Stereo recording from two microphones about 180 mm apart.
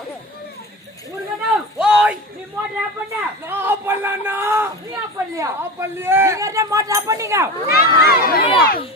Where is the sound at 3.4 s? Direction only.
10° right (ahead or behind).